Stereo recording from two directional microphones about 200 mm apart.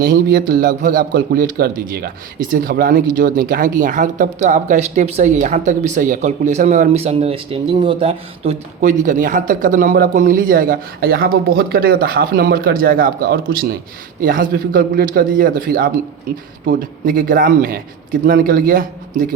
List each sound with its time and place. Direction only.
0.0 s a man's voice: 45° right (ahead or behind)